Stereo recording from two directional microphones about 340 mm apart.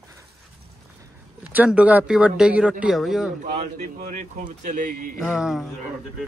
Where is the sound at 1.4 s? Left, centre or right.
Centre.